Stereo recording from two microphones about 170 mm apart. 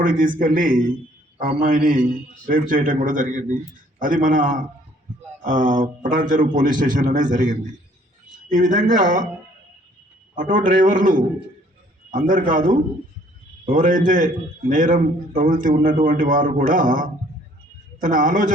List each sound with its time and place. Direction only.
0.0 s a man's voice: 55° right (ahead or behind)
10.3 s a man's voice: 50° right (ahead or behind)